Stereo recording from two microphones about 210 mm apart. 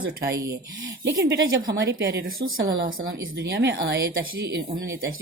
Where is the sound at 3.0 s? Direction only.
65° right (ahead or behind).